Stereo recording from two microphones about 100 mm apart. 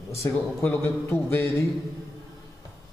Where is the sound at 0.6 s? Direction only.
20° left (ahead or behind).